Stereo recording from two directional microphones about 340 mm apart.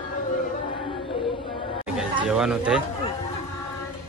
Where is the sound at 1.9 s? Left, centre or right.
Centre.